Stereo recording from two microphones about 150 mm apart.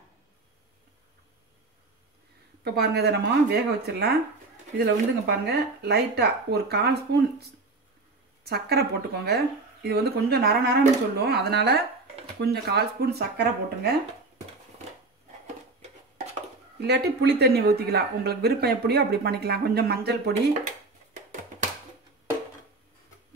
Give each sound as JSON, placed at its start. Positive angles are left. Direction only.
{"t": 2.6, "sound": "speech", "side_deg": -90}
{"t": 8.5, "sound": "speech", "side_deg": -90}
{"t": 16.8, "sound": "speech", "side_deg": -90}